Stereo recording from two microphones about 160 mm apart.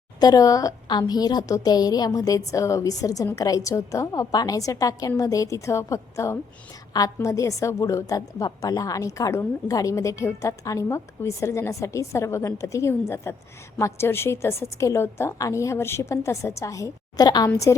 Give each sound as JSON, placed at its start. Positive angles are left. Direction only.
{"t": 0.2, "sound": "a woman's voice", "side_deg": 25}